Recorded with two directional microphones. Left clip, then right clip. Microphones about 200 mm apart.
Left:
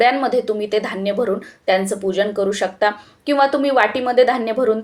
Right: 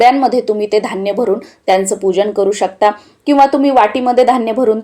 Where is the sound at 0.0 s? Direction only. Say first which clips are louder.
Right 6 dB; 35° right (ahead or behind).